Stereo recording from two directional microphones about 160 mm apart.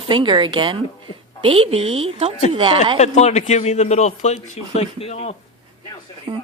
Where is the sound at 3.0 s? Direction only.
45° left (ahead or behind).